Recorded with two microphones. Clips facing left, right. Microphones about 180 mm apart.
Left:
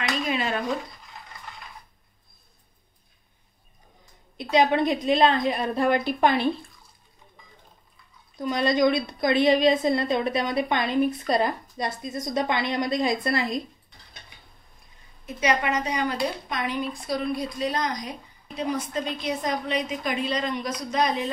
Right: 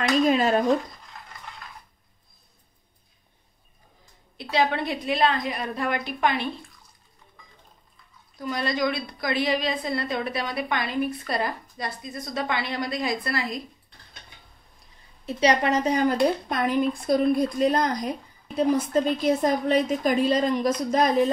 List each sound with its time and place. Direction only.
0.3 s speech: 40° right (ahead or behind)
4.4 s a woman's voice: 20° left (ahead or behind)
8.4 s a woman's voice: 20° left (ahead or behind)
15.2 s speech: 35° right (ahead or behind)